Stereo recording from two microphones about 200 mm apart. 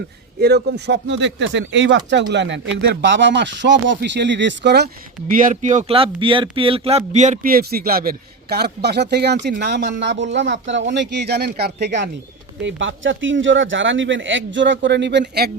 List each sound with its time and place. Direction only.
0.3 s speech: 55° right (ahead or behind)
5.3 s speech: 40° right (ahead or behind)